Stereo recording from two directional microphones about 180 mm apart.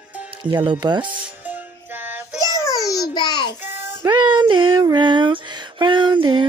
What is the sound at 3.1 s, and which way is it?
Child singing, 25° left (ahead or behind).